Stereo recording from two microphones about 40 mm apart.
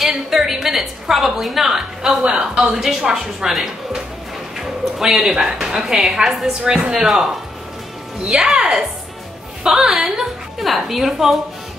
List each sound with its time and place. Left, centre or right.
0.0 s a woman's voice: centre
8.5 s a woman's voice: centre